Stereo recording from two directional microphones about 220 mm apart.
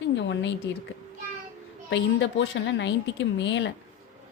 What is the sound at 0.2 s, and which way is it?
Speech, 55° left (ahead or behind).